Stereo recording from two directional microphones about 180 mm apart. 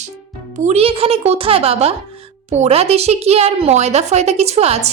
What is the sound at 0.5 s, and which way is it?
Speech, 40° right (ahead or behind).